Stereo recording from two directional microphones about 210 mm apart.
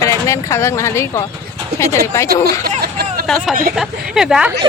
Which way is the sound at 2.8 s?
50° right (ahead or behind).